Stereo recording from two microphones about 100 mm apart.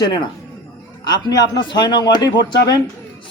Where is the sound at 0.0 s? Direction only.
45° left (ahead or behind).